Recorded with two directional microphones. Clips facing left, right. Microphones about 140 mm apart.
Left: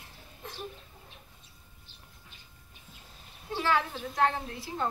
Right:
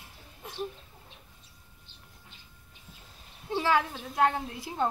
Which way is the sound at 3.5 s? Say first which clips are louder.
Right 2 dB; 15° right (ahead or behind).